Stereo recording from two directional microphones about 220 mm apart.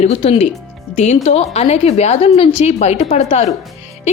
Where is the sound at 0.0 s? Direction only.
25° left (ahead or behind).